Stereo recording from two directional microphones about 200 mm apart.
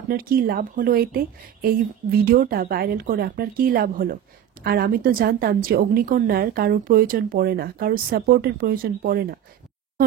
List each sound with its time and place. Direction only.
0.1 s a woman's voice: 45° right (ahead or behind)